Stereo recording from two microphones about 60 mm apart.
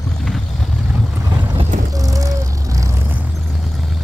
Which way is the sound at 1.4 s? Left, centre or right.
Right.